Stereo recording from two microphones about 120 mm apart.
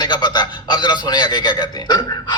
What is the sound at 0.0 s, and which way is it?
A man's voice, 35° left (ahead or behind).